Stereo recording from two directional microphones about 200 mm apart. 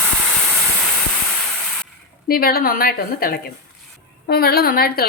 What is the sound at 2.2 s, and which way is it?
A woman's voice, 50° left (ahead or behind).